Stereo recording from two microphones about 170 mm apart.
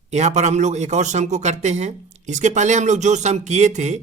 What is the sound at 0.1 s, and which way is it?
Speech, 45° right (ahead or behind).